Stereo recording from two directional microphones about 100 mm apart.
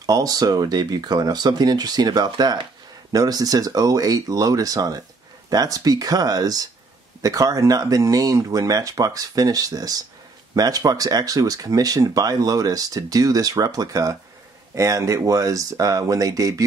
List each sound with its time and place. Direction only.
0.0 s speech: 40° right (ahead or behind)